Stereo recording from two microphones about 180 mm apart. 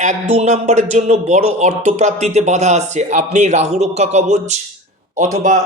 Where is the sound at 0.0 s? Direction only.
40° right (ahead or behind).